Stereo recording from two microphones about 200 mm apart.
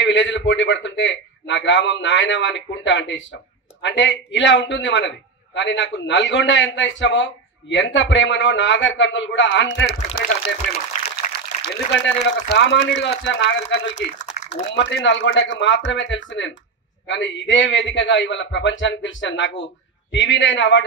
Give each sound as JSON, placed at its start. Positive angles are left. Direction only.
{"t": 0.0, "sound": "a man's voice", "side_deg": 65}
{"t": 10.9, "sound": "a sound", "side_deg": 40}
{"t": 11.6, "sound": "a man's voice", "side_deg": 55}